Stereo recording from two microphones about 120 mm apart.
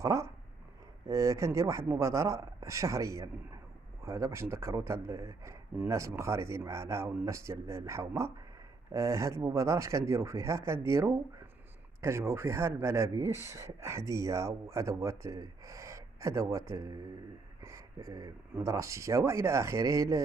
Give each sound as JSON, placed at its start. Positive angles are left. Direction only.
{"t": 0.0, "sound": "speech", "side_deg": -25}